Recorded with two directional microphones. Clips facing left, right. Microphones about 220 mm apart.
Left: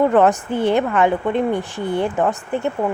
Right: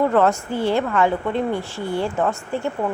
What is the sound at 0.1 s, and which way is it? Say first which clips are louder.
A woman's voice: left 3 dB; 15° left (ahead or behind).